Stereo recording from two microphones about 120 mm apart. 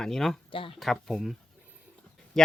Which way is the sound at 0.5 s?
50° left (ahead or behind).